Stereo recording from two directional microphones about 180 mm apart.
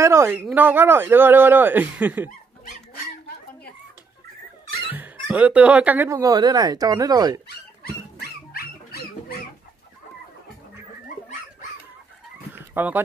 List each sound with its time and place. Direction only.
0.0 s speech: 15° right (ahead or behind)
5.3 s speech: 5° right (ahead or behind)
12.5 s dog: 10° right (ahead or behind)